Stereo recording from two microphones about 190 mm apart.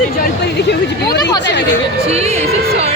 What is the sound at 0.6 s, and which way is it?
Speech, 60° left (ahead or behind).